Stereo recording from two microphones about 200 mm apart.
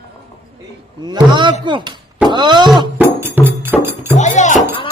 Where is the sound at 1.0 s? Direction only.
20° right (ahead or behind).